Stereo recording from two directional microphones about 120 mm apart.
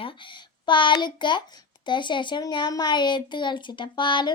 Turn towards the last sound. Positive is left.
turn(degrees=40)  # may be behind; listen again after turning